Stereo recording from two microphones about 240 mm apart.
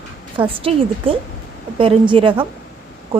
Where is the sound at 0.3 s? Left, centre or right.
Right.